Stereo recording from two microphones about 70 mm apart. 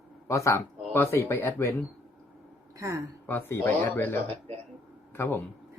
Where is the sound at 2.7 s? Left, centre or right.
Right.